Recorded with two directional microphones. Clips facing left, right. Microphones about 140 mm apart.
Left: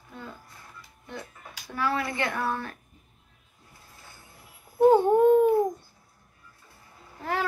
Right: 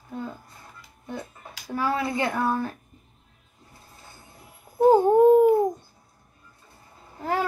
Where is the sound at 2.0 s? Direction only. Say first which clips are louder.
Right 4 dB; 25° right (ahead or behind).